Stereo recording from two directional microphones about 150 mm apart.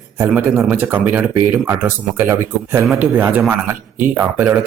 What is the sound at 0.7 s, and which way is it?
A man's voice, 15° right (ahead or behind).